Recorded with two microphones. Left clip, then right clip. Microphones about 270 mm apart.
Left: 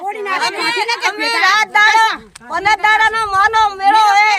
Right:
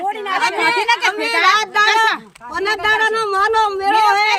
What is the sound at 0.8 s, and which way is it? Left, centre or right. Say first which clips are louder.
Children playing: even; centre.